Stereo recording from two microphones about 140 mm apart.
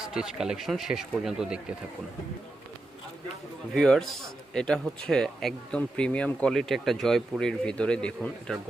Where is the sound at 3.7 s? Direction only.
5° left (ahead or behind).